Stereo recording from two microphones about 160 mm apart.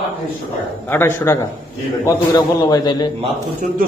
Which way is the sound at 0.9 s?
15° left (ahead or behind).